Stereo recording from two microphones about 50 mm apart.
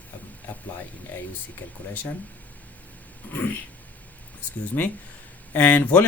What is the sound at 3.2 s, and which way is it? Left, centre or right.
Speech, left.